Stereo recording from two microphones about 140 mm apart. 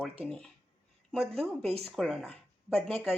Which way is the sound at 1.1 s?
Centre (ahead or behind).